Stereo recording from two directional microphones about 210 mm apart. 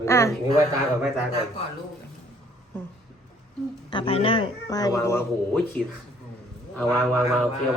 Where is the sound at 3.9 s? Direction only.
25° left (ahead or behind); by 5.8 s 5° left (ahead or behind).